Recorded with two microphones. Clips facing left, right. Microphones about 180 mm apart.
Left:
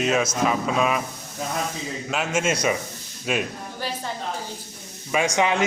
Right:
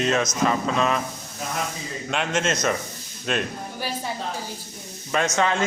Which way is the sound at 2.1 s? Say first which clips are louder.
Even; 5° left (ahead or behind).